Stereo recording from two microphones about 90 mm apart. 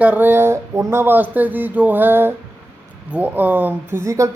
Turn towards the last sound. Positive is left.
turn(degrees=-35)  # may be behind; listen again after turning